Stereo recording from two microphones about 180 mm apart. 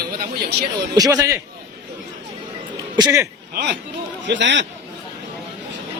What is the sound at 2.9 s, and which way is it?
Speech, 20° right (ahead or behind).